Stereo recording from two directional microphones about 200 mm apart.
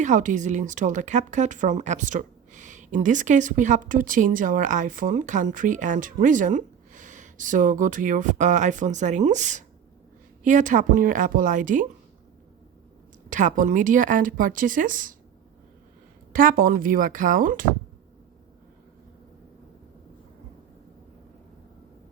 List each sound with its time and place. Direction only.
0.0 s speech: 40° right (ahead or behind)
13.3 s speech: 40° right (ahead or behind)
16.3 s speech: 45° right (ahead or behind)